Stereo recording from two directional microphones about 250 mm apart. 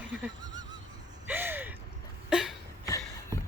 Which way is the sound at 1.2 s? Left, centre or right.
Centre.